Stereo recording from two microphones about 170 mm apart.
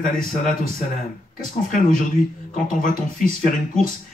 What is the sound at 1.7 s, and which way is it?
Speech, 55° left (ahead or behind).